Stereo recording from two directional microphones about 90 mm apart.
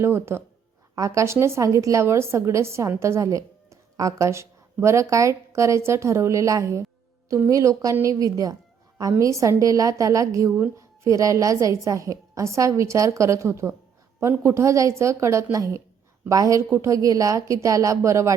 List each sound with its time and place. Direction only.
0.0 s speech: 30° right (ahead or behind)